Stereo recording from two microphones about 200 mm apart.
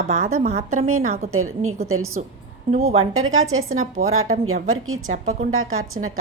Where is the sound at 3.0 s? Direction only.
90° right.